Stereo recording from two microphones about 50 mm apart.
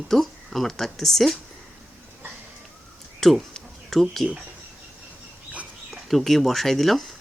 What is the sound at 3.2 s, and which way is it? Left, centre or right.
Speech, centre.